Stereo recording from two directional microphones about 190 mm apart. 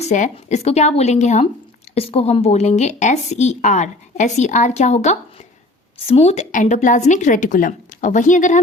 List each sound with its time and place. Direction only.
0.0 s speech: 40° left (ahead or behind)